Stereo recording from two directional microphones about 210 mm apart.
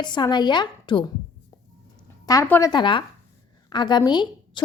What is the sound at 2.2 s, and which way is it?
A woman's voice, 15° left (ahead or behind).